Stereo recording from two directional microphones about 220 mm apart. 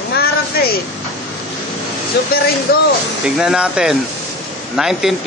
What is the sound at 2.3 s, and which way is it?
Speech, 45° left (ahead or behind).